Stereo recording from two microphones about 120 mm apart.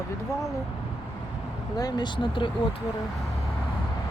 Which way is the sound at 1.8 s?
35° left (ahead or behind).